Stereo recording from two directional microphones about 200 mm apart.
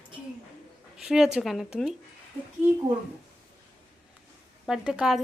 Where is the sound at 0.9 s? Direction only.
5° right (ahead or behind).